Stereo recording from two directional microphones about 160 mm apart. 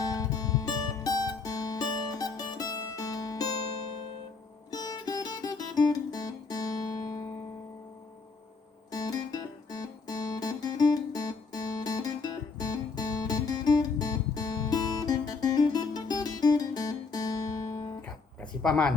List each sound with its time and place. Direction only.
0.0 s music: 25° left (ahead or behind)
4.7 s music: 25° left (ahead or behind)
8.9 s music: 25° left (ahead or behind)
18.6 s speech: 5° left (ahead or behind)